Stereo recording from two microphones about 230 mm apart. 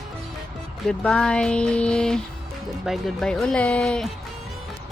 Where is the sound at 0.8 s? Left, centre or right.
Centre.